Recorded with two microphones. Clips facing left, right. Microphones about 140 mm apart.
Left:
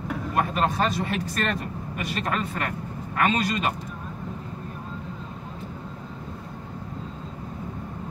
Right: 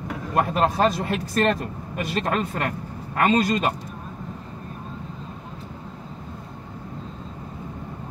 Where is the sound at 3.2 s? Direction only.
35° right (ahead or behind).